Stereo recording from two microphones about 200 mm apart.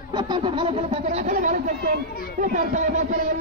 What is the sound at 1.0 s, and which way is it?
A man's voice, 40° right (ahead or behind).